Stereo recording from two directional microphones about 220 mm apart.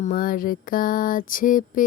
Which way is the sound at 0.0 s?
40° left (ahead or behind).